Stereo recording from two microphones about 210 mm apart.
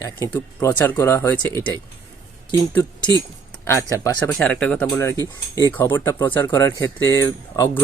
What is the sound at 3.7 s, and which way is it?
Speech, 15° left (ahead or behind).